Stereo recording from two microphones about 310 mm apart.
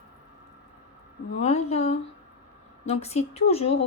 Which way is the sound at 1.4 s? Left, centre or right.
Left.